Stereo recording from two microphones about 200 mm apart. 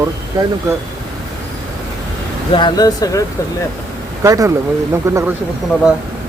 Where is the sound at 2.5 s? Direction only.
20° left (ahead or behind).